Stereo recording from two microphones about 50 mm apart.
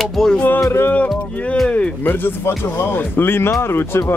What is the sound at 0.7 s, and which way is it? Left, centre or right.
Speech, left.